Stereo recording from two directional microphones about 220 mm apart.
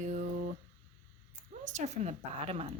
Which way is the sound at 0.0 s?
35° right (ahead or behind).